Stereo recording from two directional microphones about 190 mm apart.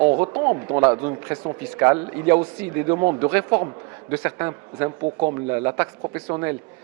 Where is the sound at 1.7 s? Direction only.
15° right (ahead or behind).